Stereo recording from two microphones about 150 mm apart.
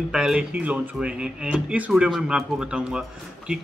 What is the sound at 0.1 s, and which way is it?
Speech, 5° right (ahead or behind).